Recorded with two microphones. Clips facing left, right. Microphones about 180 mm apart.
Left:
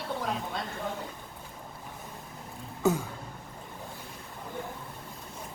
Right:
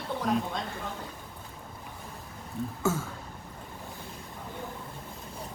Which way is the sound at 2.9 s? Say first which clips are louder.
Left 3 dB; 20° left (ahead or behind).